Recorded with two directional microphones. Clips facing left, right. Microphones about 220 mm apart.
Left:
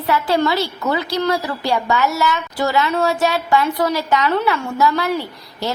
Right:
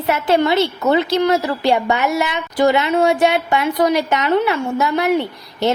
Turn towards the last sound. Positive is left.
turn(degrees=-20)  # may be behind; listen again after turning